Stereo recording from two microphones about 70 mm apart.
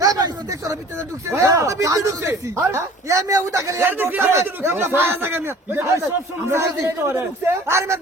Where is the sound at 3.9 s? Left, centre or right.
Right.